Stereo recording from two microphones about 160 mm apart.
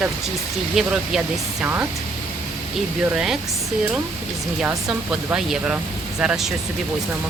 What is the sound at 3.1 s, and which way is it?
Speech, 5° right (ahead or behind).